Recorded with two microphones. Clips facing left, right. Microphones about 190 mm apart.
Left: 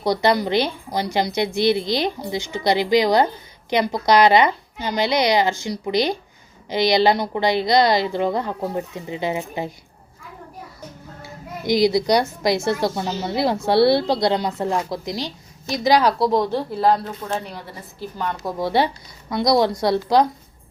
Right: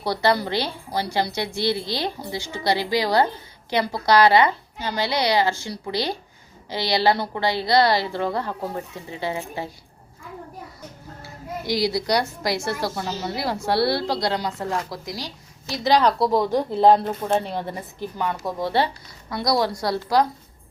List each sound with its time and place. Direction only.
0.0 s a woman's voice: 20° left (ahead or behind)
11.2 s a woman's voice: 20° left (ahead or behind)
15.7 s a woman's voice: 10° left (ahead or behind); by 17.4 s 25° right (ahead or behind)
18.0 s a woman's voice: 10° right (ahead or behind)
18.6 s a woman's voice: 15° left (ahead or behind)